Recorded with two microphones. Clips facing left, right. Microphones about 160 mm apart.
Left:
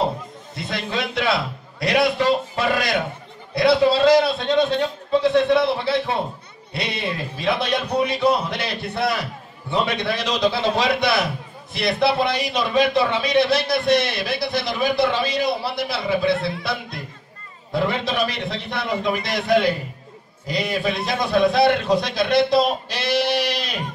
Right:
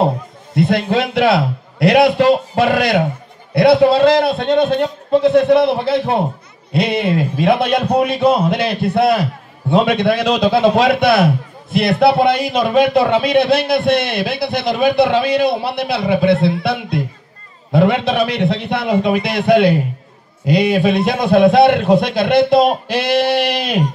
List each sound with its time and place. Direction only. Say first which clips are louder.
0.6 s a man's voice: right 11 dB; 60° right (ahead or behind)